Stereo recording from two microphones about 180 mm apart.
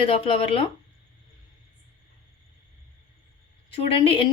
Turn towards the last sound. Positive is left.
turn(degrees=30)  # may be behind; listen again after turning